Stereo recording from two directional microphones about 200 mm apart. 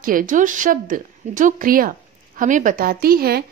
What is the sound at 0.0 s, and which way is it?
A woman's voice, 45° right (ahead or behind).